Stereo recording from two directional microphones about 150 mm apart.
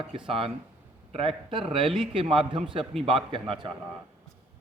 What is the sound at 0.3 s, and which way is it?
Speech, 40° right (ahead or behind).